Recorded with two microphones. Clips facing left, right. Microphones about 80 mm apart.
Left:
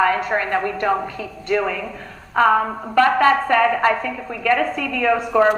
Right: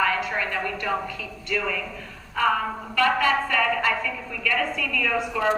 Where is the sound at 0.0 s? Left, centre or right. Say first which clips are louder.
Left 6 dB; left.